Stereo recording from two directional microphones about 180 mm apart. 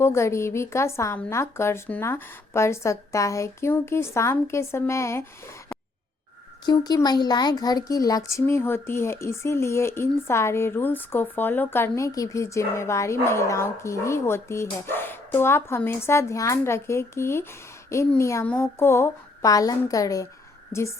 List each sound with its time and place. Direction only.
0.0 s speech: 15° left (ahead or behind)
6.7 s speech: 20° left (ahead or behind)